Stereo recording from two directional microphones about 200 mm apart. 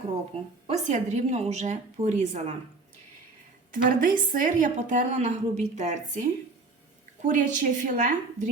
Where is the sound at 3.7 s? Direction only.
45° right (ahead or behind).